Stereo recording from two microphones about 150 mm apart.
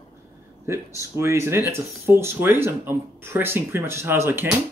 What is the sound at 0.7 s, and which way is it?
Speech, 20° right (ahead or behind).